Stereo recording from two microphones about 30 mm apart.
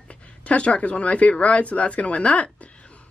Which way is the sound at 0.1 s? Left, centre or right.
Left.